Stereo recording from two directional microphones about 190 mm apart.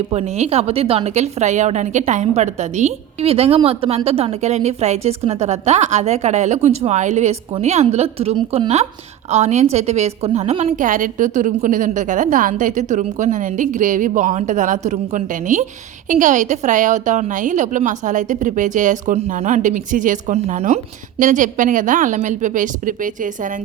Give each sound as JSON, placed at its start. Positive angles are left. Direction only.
{"t": 0.1, "sound": "a woman's voice", "side_deg": -35}